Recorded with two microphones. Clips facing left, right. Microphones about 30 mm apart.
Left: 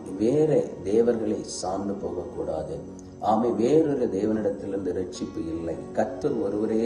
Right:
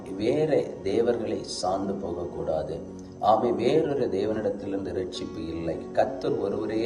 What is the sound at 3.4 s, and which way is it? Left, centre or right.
Speech, right.